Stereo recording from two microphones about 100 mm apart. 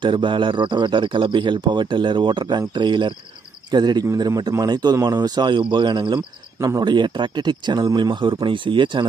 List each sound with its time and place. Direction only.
0.0 s speech: 55° right (ahead or behind)